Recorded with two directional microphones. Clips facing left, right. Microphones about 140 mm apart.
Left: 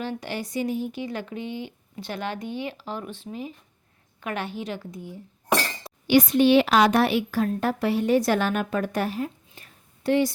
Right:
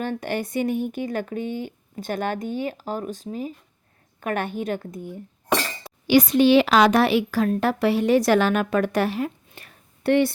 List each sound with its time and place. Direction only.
0.0 s speech: 50° right (ahead or behind)
6.1 s a woman's voice: 90° right; by 10.3 s 60° right (ahead or behind)